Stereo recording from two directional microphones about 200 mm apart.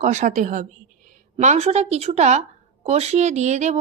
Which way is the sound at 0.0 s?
35° right (ahead or behind).